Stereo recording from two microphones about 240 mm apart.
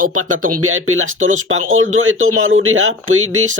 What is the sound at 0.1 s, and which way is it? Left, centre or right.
Speech, right.